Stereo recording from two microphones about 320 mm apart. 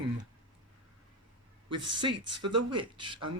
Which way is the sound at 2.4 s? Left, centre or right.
Right.